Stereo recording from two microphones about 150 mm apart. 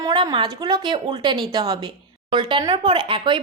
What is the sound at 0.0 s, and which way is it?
A woman's voice, 25° right (ahead or behind).